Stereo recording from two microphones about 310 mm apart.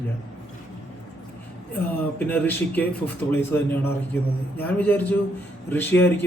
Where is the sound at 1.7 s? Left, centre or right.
Centre.